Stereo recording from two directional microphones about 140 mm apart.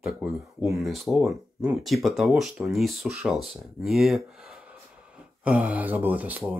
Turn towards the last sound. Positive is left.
turn(degrees=-10)  # may be behind; listen again after turning